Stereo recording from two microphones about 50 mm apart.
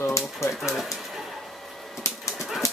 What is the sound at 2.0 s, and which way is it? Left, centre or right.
Dog, left.